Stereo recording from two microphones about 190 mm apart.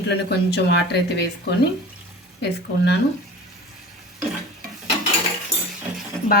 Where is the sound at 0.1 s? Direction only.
60° left (ahead or behind).